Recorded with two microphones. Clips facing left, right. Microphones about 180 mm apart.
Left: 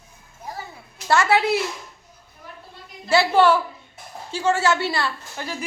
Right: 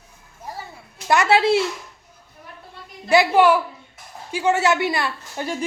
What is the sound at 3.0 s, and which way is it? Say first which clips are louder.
A woman's voice: right 2 dB; 15° right (ahead or behind).